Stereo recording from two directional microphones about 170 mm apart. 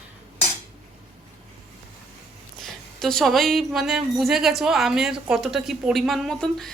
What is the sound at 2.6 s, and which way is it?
A woman's voice, centre (ahead or behind).